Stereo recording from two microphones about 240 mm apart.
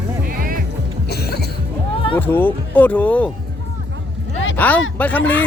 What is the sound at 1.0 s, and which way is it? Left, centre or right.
Cough, left.